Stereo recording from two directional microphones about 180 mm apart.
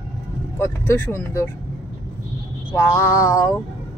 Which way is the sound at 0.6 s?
15° left (ahead or behind).